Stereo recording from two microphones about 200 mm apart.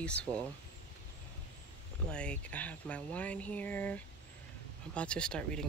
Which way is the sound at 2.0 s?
5° left (ahead or behind).